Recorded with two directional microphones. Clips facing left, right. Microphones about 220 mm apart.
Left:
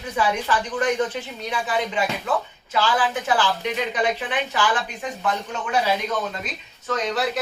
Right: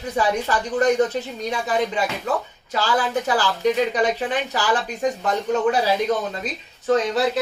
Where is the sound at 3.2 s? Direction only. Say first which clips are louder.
Right 3 dB; 40° right (ahead or behind).